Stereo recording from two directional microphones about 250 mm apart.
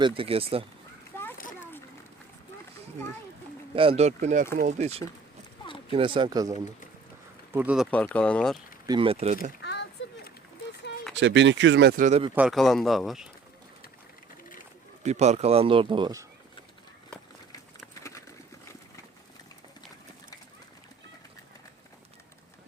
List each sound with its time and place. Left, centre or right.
0.0 s speech: right
1.1 s children playing: centre
3.8 s speech: right
7.5 s speech: centre
7.9 s speech: centre
8.9 s speech: right
11.2 s speech: right
12.3 s speech: centre
15.0 s speech: right